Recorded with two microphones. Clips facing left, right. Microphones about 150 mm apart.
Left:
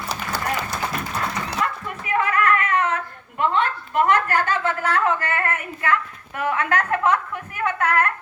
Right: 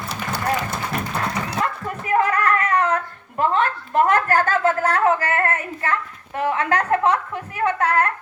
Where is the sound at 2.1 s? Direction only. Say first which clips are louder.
Right 1 dB; 35° right (ahead or behind).